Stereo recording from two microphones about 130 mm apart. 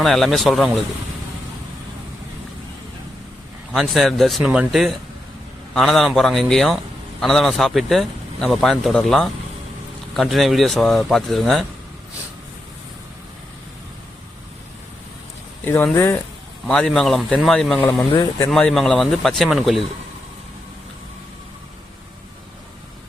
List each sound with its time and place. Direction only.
0.0 s speech: centre (ahead or behind)
3.7 s speech: centre (ahead or behind)
15.6 s speech: 15° left (ahead or behind)
16.6 s speech: 5° left (ahead or behind)
18.2 s speech: 25° left (ahead or behind)
18.5 s speech: centre (ahead or behind)